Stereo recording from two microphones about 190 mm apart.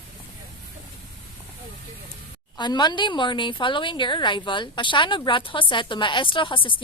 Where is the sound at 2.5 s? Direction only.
25° left (ahead or behind).